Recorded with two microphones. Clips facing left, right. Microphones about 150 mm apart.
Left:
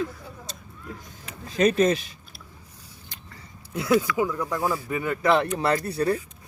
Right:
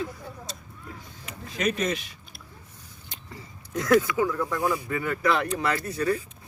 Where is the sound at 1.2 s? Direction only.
30° left (ahead or behind).